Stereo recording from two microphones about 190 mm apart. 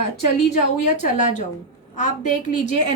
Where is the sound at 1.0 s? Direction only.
40° left (ahead or behind).